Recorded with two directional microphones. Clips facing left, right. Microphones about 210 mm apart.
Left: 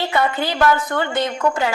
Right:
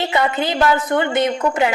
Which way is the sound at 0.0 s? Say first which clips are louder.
Right 1 dB; 20° right (ahead or behind).